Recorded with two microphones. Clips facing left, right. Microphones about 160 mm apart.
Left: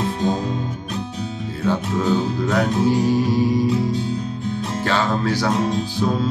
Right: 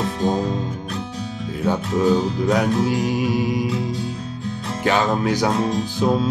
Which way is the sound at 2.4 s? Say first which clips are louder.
Left 2 dB; 15° right (ahead or behind).